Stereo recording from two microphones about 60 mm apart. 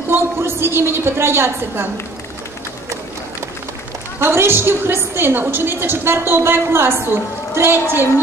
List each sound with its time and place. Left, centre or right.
0.1 s a woman's voice: right
4.2 s a woman's voice: right